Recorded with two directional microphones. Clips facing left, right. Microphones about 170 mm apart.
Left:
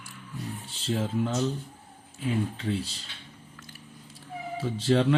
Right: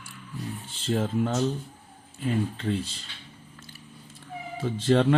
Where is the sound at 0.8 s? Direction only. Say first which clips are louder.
Right 2 dB; 50° right (ahead or behind).